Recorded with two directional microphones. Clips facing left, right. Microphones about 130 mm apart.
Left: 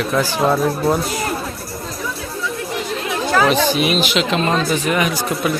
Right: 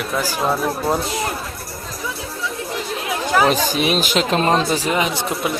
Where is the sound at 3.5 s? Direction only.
40° right (ahead or behind).